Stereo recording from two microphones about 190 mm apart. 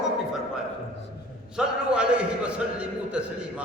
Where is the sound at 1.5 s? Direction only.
5° right (ahead or behind).